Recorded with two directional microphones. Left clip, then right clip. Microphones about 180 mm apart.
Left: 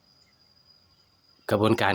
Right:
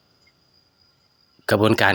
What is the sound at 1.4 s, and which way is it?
Speech, 25° right (ahead or behind).